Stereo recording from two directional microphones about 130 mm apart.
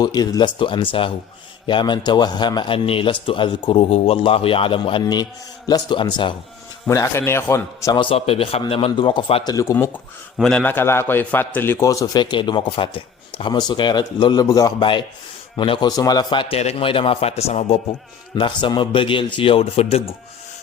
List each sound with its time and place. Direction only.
0.0 s a man's voice: 30° left (ahead or behind)
6.8 s a man's voice: 25° left (ahead or behind)
7.9 s a man's voice: 45° left (ahead or behind)
10.3 s a man's voice: 5° left (ahead or behind); by 16.6 s 40° left (ahead or behind)
16.6 s a man's voice: 50° left (ahead or behind)
18.3 s a man's voice: 40° left (ahead or behind)